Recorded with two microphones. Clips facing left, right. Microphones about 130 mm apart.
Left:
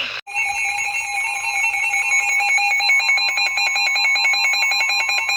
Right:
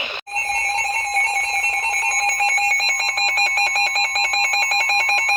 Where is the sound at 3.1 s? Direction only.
10° right (ahead or behind).